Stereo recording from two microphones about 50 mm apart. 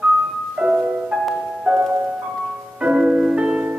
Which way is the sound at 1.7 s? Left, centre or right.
Centre.